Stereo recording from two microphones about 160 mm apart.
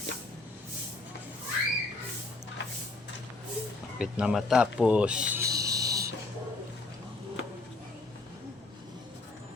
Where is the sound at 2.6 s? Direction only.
90° left.